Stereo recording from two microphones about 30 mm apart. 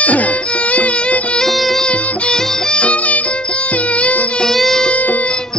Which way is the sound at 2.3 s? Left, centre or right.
Left.